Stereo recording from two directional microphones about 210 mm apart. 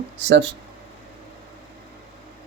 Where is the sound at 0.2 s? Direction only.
55° right (ahead or behind).